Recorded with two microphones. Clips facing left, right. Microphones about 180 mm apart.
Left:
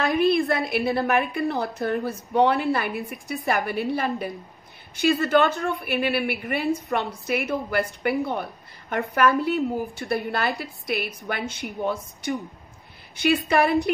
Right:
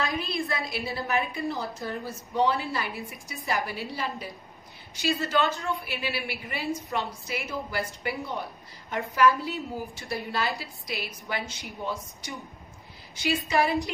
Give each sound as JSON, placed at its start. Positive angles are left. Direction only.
{"t": 0.0, "sound": "a woman's voice", "side_deg": 60}